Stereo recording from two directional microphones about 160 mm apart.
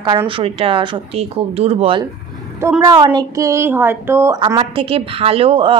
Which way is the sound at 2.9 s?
25° right (ahead or behind).